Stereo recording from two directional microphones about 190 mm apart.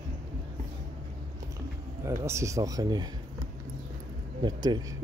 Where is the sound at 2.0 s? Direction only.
15° right (ahead or behind).